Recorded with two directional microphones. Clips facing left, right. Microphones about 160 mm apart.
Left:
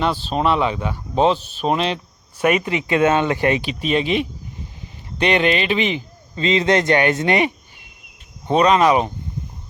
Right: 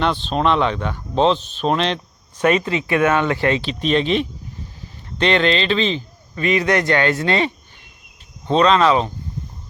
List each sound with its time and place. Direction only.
0.0 s speech: 5° left (ahead or behind)